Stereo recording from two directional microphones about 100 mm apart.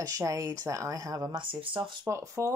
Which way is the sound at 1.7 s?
30° right (ahead or behind).